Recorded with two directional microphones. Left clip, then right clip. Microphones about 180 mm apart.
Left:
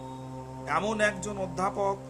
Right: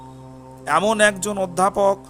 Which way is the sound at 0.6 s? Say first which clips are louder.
Right 10 dB; 50° right (ahead or behind).